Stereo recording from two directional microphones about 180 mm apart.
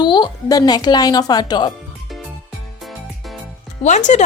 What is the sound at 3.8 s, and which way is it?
Speech, 40° left (ahead or behind).